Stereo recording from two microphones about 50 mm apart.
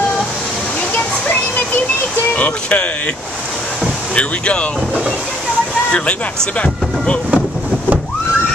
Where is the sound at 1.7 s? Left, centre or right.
Left.